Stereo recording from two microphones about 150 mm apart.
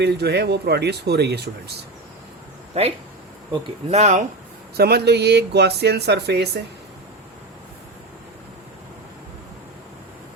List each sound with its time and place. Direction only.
0.0 s speech: 90° right
2.8 s speech: 45° right (ahead or behind)
4.8 s speech: 90° right